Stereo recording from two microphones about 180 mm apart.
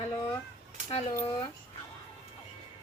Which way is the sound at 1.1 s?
25° left (ahead or behind).